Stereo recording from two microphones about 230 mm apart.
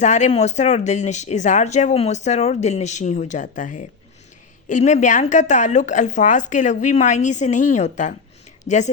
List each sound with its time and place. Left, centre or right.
0.0 s speech: left